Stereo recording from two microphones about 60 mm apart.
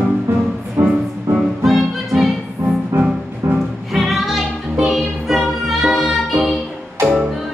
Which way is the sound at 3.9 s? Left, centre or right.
Centre.